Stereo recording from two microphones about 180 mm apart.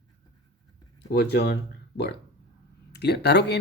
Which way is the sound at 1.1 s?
70° left (ahead or behind).